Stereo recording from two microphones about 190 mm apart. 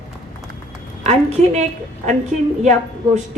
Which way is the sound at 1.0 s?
35° right (ahead or behind).